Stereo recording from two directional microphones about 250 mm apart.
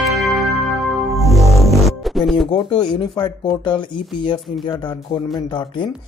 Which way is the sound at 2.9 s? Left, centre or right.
Centre.